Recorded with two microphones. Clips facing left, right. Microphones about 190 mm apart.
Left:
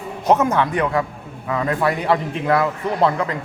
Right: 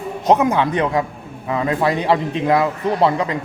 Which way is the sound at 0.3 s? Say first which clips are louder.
Right 1 dB; 15° right (ahead or behind).